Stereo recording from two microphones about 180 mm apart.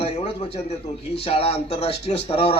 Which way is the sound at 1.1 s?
35° left (ahead or behind).